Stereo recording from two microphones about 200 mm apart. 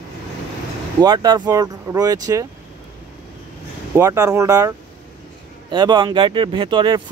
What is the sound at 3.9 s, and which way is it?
Speech, 15° right (ahead or behind).